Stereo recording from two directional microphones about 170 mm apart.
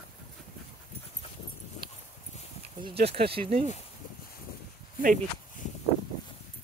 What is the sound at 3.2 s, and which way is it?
Speech, 35° right (ahead or behind).